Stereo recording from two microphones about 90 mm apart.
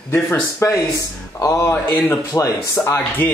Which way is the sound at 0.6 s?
35° left (ahead or behind).